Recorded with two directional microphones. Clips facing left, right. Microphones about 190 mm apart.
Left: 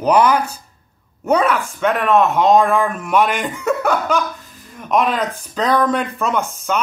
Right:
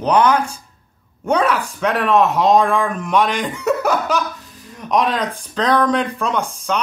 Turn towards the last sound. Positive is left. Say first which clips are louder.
# left 1 dB
turn(degrees=5)  # may be behind; listen again after turning